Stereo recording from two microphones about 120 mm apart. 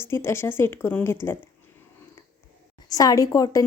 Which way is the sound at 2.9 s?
30° left (ahead or behind).